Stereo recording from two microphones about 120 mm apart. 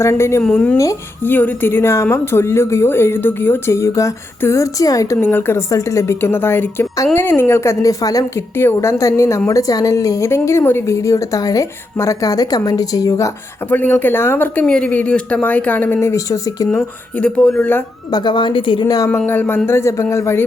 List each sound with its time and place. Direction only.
0.0 s speech: 25° left (ahead or behind)
0.4 s speech: 10° left (ahead or behind)
0.8 s speech: 25° left (ahead or behind)
1.3 s speech: 15° left (ahead or behind)
13.7 s speech: 15° left (ahead or behind)
17.2 s speech: 10° left (ahead or behind)
18.1 s speech: 40° left (ahead or behind)
19.1 s speech: 15° left (ahead or behind)